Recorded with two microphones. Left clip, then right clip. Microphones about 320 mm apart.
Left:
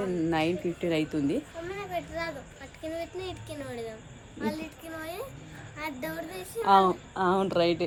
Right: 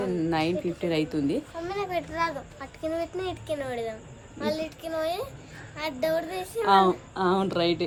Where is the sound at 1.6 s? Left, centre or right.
Centre.